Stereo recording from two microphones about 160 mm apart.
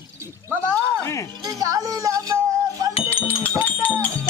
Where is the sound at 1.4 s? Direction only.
20° right (ahead or behind).